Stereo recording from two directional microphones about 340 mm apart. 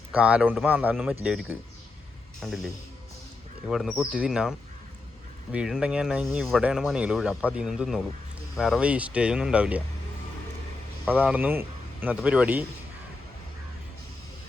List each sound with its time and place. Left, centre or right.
0.1 s speech: centre
11.0 s speech: centre